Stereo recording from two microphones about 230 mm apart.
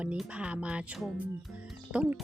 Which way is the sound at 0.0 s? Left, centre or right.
Centre.